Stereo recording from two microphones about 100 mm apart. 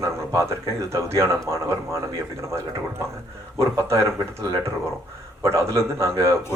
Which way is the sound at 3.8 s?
30° right (ahead or behind).